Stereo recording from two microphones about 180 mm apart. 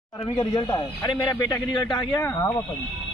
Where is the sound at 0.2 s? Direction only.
25° left (ahead or behind).